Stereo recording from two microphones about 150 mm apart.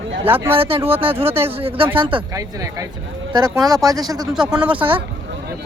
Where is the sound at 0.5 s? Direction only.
40° right (ahead or behind).